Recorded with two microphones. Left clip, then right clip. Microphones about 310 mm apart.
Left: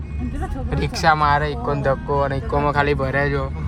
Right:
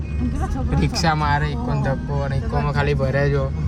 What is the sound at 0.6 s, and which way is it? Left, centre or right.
Speech, centre.